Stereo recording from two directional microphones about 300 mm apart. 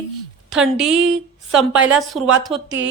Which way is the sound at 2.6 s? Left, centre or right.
Right.